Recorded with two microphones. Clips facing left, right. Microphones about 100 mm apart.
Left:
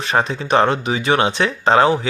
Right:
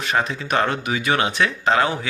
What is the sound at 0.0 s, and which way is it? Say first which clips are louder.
Speech: left 3 dB; 35° left (ahead or behind).